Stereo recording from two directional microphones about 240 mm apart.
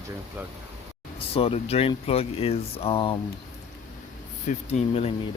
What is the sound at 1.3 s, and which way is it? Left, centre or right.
Speech, left.